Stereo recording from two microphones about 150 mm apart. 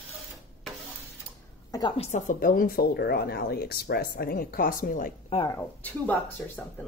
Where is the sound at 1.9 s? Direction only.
55° left (ahead or behind).